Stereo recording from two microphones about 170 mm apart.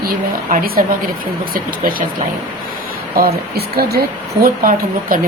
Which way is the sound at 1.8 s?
55° right (ahead or behind).